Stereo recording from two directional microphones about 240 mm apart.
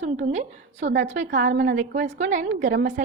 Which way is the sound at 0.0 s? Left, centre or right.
Right.